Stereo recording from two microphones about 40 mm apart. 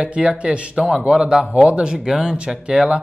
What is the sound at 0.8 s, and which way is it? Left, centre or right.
Speech, centre.